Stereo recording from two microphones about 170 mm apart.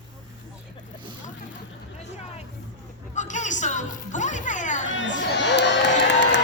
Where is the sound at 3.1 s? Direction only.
45° left (ahead or behind).